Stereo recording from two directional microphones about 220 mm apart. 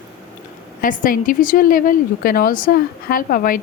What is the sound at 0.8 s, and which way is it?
A woman's voice, 40° left (ahead or behind).